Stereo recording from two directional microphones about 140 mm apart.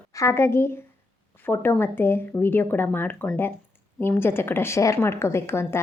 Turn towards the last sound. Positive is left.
turn(degrees=20)  # may be behind; listen again after turning